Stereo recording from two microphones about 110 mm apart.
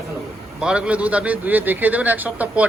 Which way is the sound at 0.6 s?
10° right (ahead or behind).